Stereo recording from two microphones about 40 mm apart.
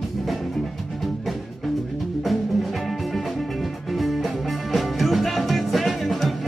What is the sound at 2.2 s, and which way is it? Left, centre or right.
Music, centre.